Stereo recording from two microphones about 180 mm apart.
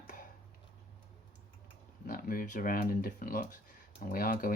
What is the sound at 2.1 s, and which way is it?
Speech, 50° left (ahead or behind).